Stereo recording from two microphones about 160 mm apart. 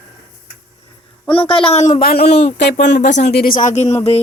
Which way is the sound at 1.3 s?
35° left (ahead or behind).